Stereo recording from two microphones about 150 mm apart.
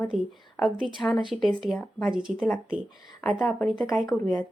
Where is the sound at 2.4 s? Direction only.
10° left (ahead or behind).